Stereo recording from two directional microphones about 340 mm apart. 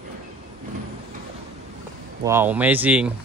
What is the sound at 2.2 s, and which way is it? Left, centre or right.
Speech, centre.